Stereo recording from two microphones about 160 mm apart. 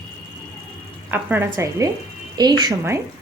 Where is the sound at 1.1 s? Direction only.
15° right (ahead or behind).